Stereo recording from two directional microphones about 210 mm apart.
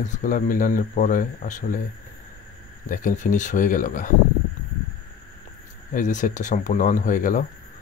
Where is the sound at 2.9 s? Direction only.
40° left (ahead or behind).